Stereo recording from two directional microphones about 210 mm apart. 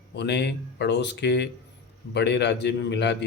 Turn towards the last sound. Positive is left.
turn(degrees=55)  # may be behind; listen again after turning